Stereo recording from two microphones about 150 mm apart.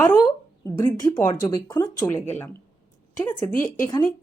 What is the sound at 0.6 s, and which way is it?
Speech, 25° left (ahead or behind).